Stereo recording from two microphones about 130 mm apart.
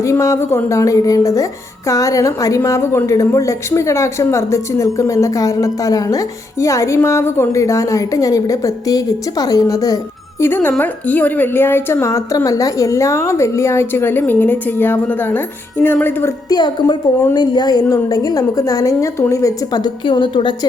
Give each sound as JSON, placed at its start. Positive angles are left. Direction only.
{"t": 0.0, "sound": "a woman's voice", "side_deg": 25}
{"t": 10.4, "sound": "a woman's voice", "side_deg": 15}
{"t": 16.5, "sound": "a woman's voice", "side_deg": 35}